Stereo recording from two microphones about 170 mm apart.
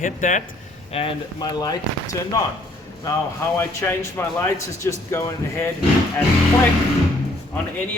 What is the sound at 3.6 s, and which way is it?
Speech, 15° left (ahead or behind).